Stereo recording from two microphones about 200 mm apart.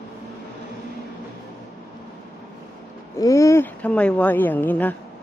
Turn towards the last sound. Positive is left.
turn(degrees=10)  # may be behind; listen again after turning